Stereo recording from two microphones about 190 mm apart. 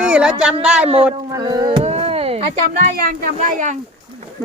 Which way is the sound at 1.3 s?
20° right (ahead or behind).